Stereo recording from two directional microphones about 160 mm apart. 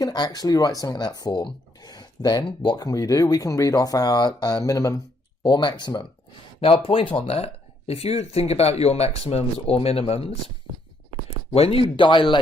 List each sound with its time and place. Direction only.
0.0 s speech: 25° left (ahead or behind)
11.5 s speech: 40° left (ahead or behind)